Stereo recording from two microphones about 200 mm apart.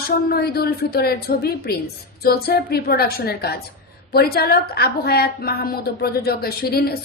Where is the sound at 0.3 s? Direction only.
50° left (ahead or behind).